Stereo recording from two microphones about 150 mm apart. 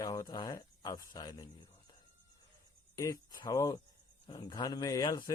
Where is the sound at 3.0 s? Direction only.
25° left (ahead or behind).